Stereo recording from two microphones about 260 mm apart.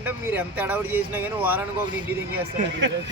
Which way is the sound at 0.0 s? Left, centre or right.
Centre.